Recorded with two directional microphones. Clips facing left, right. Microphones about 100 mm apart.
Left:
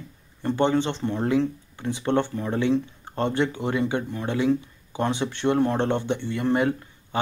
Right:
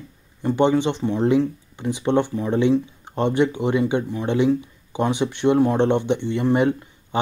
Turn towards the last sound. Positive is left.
turn(degrees=-20)  # may be behind; listen again after turning